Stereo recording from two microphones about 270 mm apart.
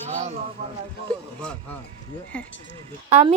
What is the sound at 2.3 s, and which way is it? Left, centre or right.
Speech, centre.